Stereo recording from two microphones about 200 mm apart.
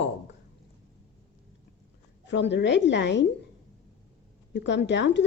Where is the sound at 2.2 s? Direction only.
60° left (ahead or behind).